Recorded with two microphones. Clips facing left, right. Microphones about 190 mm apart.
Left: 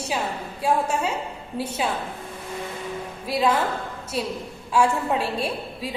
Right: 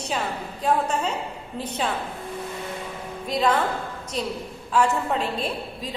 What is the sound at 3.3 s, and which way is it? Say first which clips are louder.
Speech: left 1 dB; 5° left (ahead or behind).